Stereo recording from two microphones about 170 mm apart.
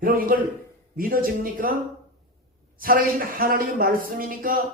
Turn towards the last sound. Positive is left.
turn(degrees=-55)  # may be behind; listen again after turning